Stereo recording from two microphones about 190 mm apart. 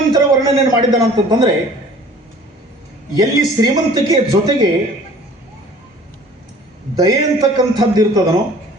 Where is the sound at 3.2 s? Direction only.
20° right (ahead or behind).